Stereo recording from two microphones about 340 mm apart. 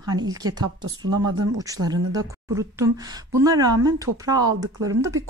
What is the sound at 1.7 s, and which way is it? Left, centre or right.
A woman's voice, centre.